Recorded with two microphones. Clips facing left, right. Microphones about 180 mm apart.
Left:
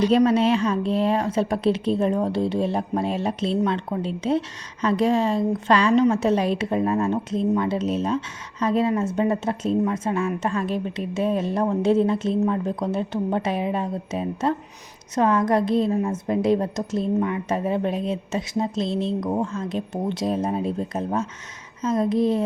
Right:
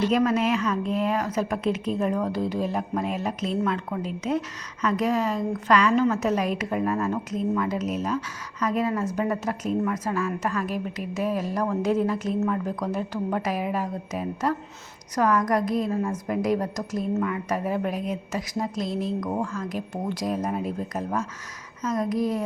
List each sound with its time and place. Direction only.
0.3 s a woman's voice: 30° left (ahead or behind)